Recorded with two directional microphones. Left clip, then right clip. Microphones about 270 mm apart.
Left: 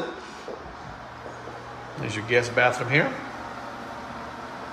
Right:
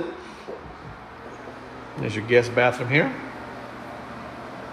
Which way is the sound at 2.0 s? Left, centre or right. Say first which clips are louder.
Right 4 dB; centre.